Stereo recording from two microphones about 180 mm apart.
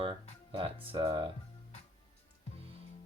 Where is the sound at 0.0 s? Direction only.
30° right (ahead or behind).